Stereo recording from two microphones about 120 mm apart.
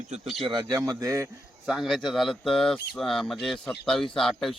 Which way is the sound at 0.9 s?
30° right (ahead or behind).